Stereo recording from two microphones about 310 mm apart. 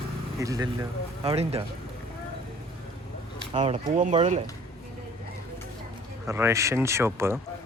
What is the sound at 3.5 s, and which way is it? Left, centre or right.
Speech, centre.